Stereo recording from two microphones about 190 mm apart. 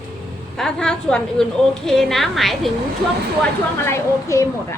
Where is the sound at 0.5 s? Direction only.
5° left (ahead or behind).